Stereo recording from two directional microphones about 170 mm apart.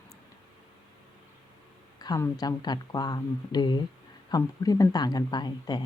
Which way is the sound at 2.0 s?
20° left (ahead or behind).